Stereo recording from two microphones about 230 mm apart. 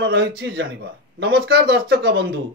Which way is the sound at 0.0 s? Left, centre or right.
Right.